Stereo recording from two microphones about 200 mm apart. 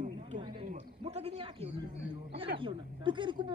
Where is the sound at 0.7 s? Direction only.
45° right (ahead or behind).